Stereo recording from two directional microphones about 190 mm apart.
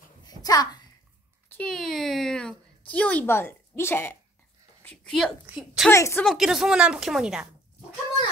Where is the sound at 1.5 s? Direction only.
5° left (ahead or behind).